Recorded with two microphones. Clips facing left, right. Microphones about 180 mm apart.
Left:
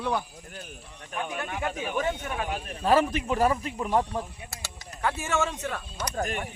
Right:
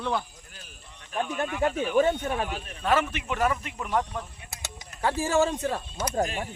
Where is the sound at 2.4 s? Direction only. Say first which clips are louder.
Left 2 dB; 40° left (ahead or behind).